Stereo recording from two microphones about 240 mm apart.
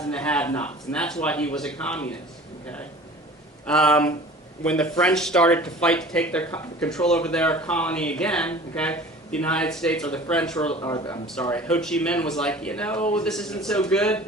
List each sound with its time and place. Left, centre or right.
0.0 s speech: centre
3.7 s speech: centre
10.8 s speech: centre
11.3 s speech: centre